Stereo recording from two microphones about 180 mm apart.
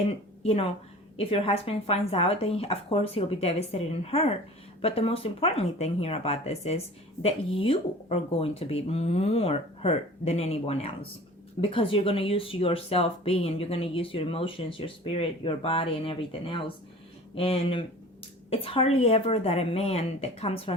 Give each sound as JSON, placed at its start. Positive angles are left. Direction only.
{"t": 0.4, "sound": "speech", "side_deg": 35}